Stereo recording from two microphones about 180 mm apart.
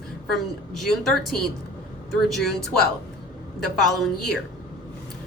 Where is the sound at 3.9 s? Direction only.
Centre (ahead or behind).